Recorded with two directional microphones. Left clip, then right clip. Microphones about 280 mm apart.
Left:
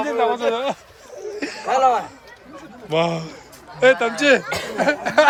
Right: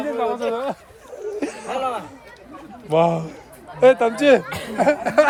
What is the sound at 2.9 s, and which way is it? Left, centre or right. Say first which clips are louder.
Speech: right 3 dB; centre.